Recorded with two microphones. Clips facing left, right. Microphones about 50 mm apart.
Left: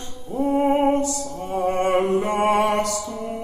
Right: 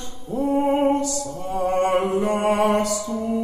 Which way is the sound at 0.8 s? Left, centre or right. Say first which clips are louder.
Even; left.